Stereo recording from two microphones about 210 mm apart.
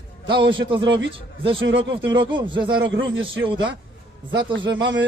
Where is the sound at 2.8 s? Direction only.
65° right (ahead or behind).